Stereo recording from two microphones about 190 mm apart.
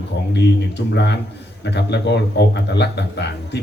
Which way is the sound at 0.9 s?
65° left (ahead or behind).